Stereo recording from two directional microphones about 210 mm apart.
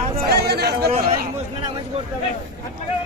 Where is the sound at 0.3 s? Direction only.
50° right (ahead or behind).